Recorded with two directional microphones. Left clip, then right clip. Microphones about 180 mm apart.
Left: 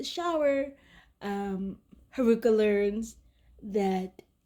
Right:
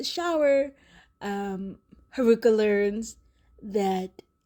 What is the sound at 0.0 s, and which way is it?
A woman's voice, 40° right (ahead or behind).